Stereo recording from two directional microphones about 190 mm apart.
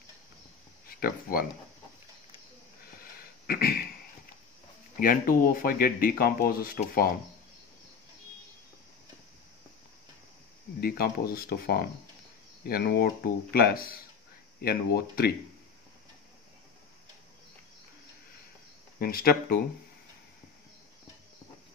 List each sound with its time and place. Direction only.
0.8 s speech: 50° left (ahead or behind)
3.4 s speech: 50° left (ahead or behind)
4.9 s speech: 45° left (ahead or behind)
10.8 s speech: 50° left (ahead or behind)
18.9 s speech: 50° left (ahead or behind)